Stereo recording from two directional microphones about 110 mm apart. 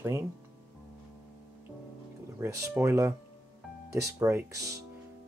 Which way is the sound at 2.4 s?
20° right (ahead or behind).